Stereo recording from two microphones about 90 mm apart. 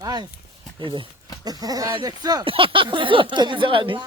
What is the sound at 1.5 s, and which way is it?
Speech, 45° right (ahead or behind).